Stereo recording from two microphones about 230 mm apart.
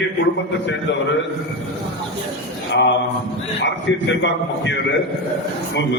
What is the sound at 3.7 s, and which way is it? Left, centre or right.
A man's voice, left.